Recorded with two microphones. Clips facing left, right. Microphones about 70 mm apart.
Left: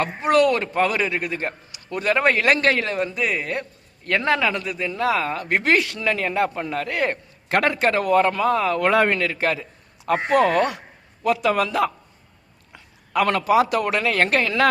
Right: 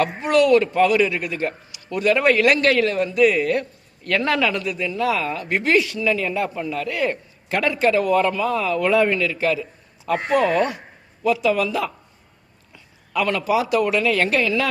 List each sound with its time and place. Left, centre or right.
0.0 s a man's voice: left